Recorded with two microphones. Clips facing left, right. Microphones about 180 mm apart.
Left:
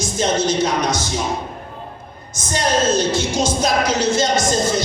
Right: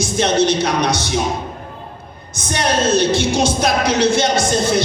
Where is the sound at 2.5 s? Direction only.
70° right (ahead or behind).